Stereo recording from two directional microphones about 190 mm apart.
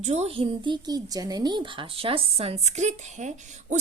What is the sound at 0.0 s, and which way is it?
A woman's voice, 35° right (ahead or behind).